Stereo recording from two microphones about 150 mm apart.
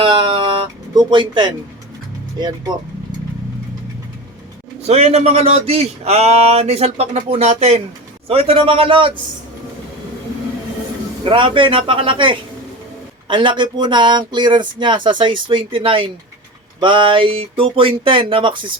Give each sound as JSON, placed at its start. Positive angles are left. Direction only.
{"t": 0.0, "sound": "music", "side_deg": -30}
{"t": 4.9, "sound": "a man's voice", "side_deg": -45}
{"t": 11.2, "sound": "speech", "side_deg": -35}